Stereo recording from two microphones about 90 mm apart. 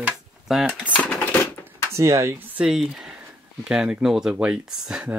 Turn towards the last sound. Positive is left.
turn(degrees=-10)  # may be behind; listen again after turning